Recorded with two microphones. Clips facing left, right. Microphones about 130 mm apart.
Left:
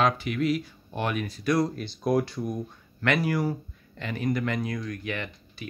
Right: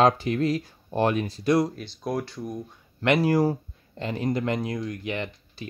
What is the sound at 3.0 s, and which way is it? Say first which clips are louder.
Speech: right 4 dB; 25° right (ahead or behind).